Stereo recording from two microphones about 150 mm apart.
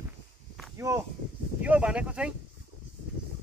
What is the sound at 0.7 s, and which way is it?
Speech, 20° right (ahead or behind).